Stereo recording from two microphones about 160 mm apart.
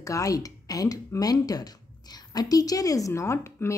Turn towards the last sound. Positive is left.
turn(degrees=15)  # may be behind; listen again after turning